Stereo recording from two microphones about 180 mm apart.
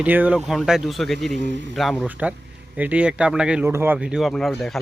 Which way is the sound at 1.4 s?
80° right.